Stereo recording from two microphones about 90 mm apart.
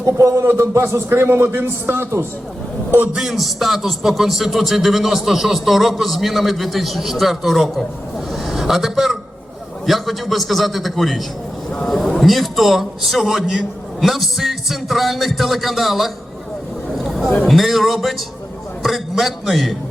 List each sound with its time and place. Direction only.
0.0 s a man's voice: 35° right (ahead or behind)
3.2 s a man's voice: centre (ahead or behind)
17.0 s a sound: centre (ahead or behind)
17.5 s speech: centre (ahead or behind)